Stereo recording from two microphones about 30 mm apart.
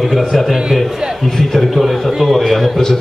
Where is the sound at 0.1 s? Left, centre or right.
Centre.